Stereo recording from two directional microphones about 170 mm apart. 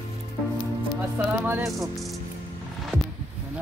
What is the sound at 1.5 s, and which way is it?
Speech, 15° right (ahead or behind).